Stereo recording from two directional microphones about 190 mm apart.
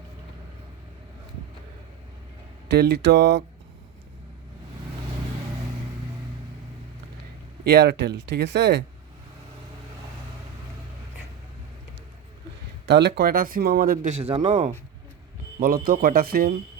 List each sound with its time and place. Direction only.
2.6 s speech: 60° right (ahead or behind)
7.6 s speech: 60° right (ahead or behind)
12.8 s speech: 65° right (ahead or behind)
14.1 s a man's voice: 30° right (ahead or behind)
15.6 s speech: 50° right (ahead or behind)